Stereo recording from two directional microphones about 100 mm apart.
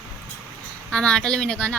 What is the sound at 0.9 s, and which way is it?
Speech, 10° left (ahead or behind).